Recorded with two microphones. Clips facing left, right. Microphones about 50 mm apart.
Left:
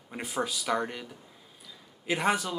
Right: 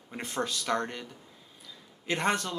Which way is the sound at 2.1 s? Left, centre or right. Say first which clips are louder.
Left 1 dB; centre.